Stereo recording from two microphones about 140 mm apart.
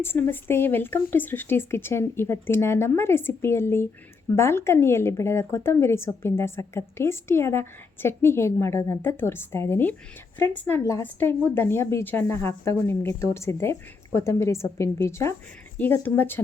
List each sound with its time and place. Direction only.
0.0 s speech: 15° left (ahead or behind)